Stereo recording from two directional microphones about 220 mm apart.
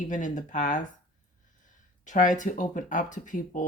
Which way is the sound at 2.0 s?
35° left (ahead or behind).